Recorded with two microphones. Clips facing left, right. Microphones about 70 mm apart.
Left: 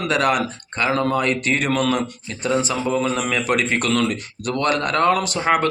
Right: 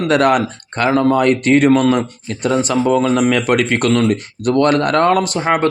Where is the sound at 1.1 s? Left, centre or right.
Right.